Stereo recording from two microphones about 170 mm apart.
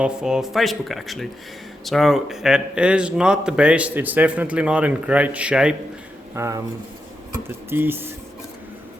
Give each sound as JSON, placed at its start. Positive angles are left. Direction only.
{"t": 0.0, "sound": "speech", "side_deg": -5}
{"t": 6.3, "sound": "speech", "side_deg": -15}